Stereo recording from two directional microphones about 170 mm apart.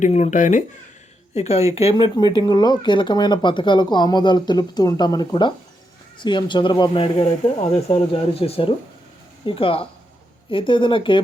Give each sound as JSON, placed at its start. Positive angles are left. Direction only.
{"t": 0.0, "sound": "speech", "side_deg": 45}
{"t": 2.1, "sound": "speech", "side_deg": 25}